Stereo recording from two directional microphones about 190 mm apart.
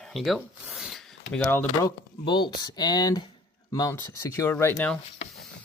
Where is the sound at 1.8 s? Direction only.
25° left (ahead or behind).